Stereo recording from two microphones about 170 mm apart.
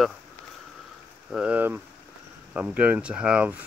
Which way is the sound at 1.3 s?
5° right (ahead or behind).